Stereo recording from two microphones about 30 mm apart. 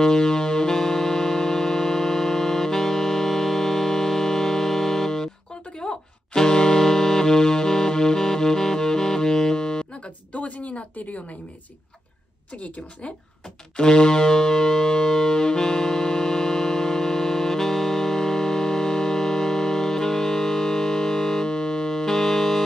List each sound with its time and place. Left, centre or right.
0.0 s music: centre
6.8 s accordion: centre
10.3 s a sound: left
12.5 s a woman's voice: left
13.7 s music: left; by 22.6 s centre